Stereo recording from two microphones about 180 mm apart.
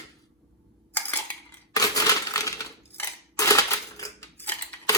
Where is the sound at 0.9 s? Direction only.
10° left (ahead or behind).